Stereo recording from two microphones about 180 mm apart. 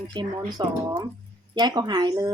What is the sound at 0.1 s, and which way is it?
Speech, 25° right (ahead or behind).